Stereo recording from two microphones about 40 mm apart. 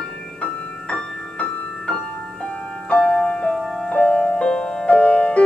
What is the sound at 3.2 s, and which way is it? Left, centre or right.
Music, left.